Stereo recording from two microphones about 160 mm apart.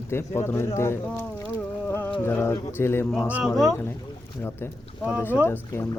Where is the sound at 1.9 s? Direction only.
10° left (ahead or behind).